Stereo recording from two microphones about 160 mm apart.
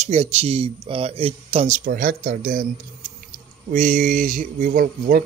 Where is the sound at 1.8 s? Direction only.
55° right (ahead or behind).